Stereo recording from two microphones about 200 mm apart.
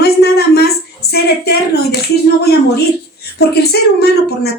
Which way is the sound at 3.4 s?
50° left (ahead or behind).